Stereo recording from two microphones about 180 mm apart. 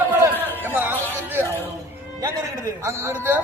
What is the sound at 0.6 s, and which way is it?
Music, 10° right (ahead or behind).